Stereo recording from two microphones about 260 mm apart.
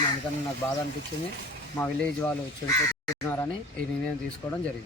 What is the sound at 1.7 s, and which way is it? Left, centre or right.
Speech, centre.